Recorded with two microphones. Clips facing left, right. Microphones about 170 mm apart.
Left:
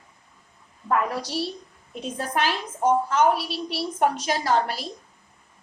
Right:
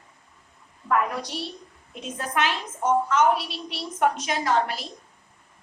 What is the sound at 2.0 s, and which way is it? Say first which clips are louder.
A woman's voice: left 1 dB; 30° left (ahead or behind).